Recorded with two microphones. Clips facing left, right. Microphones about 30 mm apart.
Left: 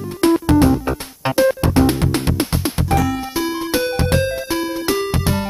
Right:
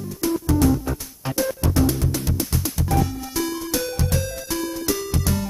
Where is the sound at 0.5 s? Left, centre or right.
Left.